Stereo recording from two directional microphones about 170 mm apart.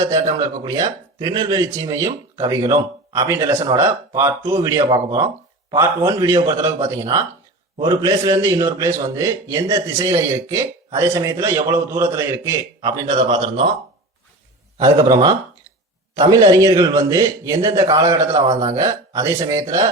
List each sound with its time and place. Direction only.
0.0 s a man's voice: 20° right (ahead or behind)
14.8 s a man's voice: 20° right (ahead or behind)